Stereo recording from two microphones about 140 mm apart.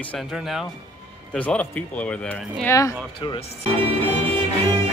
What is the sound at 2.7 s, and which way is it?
Speech, 20° left (ahead or behind).